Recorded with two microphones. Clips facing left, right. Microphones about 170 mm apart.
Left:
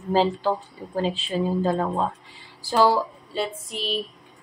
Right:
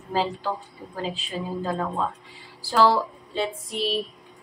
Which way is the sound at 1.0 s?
30° left (ahead or behind).